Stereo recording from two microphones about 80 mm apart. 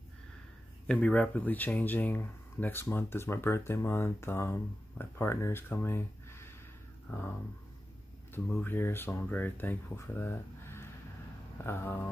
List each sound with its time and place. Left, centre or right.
0.8 s speech: centre; by 6.5 s left
7.1 s a sound: left
8.6 s speech: left